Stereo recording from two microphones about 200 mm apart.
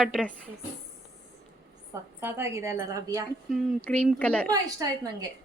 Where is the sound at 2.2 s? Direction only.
10° right (ahead or behind).